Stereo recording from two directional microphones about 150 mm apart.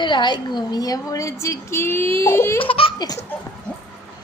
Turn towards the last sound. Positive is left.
turn(degrees=25)  # may be behind; listen again after turning